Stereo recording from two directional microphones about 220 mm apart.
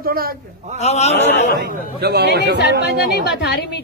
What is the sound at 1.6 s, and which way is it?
A man's voice, 45° right (ahead or behind).